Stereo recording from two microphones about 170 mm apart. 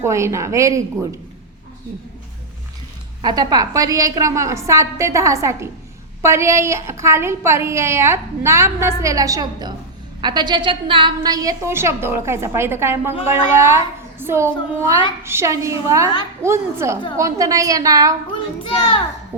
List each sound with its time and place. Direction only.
0.0 s a woman's voice: 15° right (ahead or behind)
3.2 s a woman's voice: 25° right (ahead or behind)
18.6 s a child's voice: 30° left (ahead or behind)